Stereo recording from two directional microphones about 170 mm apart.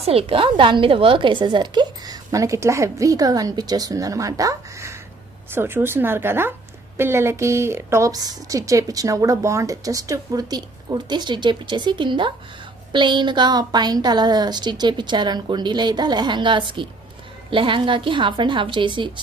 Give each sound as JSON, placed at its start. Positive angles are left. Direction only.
{"t": 0.0, "sound": "a woman's voice", "side_deg": -35}